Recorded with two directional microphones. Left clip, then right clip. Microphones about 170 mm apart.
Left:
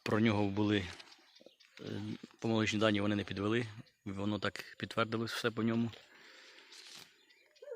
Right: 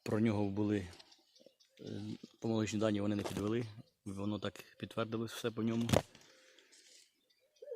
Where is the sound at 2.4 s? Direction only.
Centre (ahead or behind).